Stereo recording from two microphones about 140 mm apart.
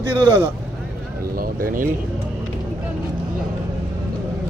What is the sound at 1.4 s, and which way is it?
Speech, 85° right.